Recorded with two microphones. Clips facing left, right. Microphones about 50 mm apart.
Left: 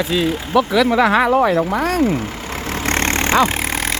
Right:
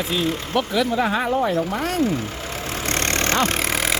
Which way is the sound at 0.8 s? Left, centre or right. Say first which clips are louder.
Left 7 dB; left.